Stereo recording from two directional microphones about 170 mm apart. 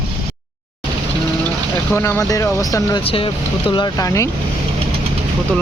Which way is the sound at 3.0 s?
35° left (ahead or behind).